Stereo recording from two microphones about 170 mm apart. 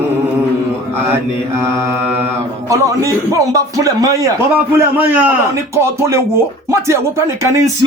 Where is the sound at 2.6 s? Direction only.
20° right (ahead or behind).